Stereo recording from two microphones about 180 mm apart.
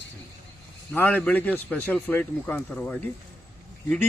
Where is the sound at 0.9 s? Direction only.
10° left (ahead or behind).